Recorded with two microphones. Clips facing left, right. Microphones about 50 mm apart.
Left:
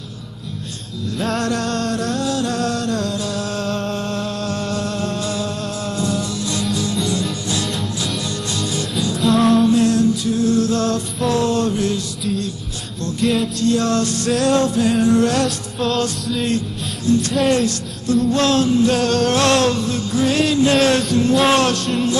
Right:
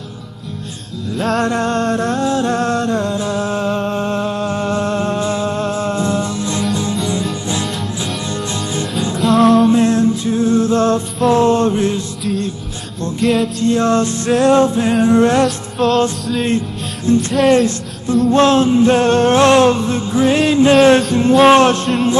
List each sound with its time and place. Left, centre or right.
1.1 s music: centre
1.4 s music: right
8.3 s music: right
9.2 s music: centre
9.7 s music: right
13.2 s music: centre
13.6 s music: right
15.4 s music: centre
16.4 s music: right
18.3 s music: right